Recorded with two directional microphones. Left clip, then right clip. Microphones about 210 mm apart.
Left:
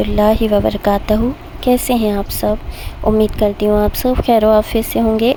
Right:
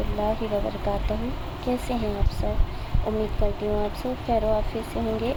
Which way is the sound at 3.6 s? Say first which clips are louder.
Left 13 dB; 45° left (ahead or behind).